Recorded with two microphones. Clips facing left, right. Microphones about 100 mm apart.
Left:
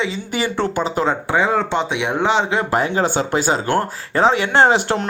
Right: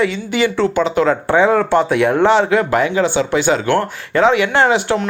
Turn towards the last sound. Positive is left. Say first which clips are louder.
# even
turn(degrees=35)  # may be behind; listen again after turning